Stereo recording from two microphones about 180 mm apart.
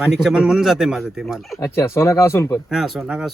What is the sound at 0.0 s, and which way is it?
Speech, centre (ahead or behind).